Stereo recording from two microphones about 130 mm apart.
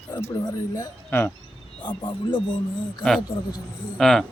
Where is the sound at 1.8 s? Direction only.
40° left (ahead or behind).